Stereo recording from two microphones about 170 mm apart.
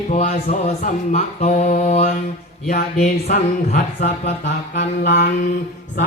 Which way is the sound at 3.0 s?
45° left (ahead or behind).